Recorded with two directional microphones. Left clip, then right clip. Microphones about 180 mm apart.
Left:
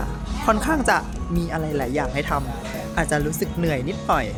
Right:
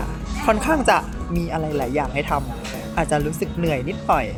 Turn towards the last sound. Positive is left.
turn(degrees=5)  # may be behind; listen again after turning